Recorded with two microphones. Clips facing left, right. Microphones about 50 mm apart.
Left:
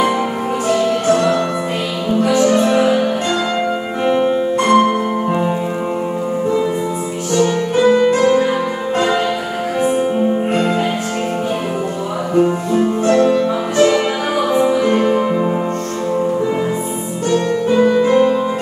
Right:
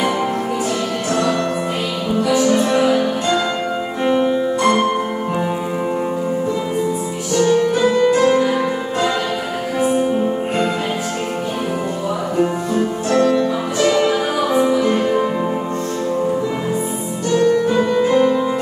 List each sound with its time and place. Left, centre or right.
2.4 s music: centre
4.6 s music: centre
7.8 s music: centre
9.8 s music: centre
12.4 s music: centre
14.5 s music: centre
17.7 s music: centre